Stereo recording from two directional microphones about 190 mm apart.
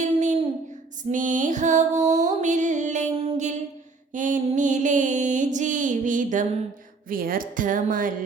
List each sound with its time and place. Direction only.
0.0 s a sound: 40° right (ahead or behind)
1.1 s music: 45° right (ahead or behind)
7.1 s a woman's voice: 50° right (ahead or behind)